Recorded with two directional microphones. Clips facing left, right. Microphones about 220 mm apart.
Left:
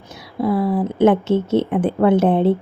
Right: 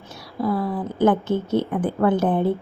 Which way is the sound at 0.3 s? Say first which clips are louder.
Left 5 dB; 25° left (ahead or behind).